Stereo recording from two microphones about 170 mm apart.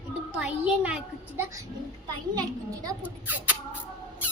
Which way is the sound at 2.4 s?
20° right (ahead or behind).